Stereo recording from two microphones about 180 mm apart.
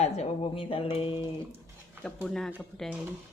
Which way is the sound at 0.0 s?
35° left (ahead or behind).